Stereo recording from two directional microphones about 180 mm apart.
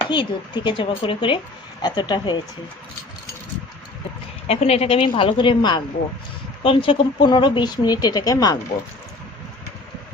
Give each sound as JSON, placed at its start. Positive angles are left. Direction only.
{"t": 0.1, "sound": "speech", "side_deg": 25}
{"t": 4.4, "sound": "a woman's voice", "side_deg": 35}